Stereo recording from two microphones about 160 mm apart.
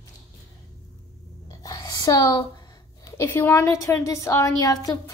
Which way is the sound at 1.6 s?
25° left (ahead or behind).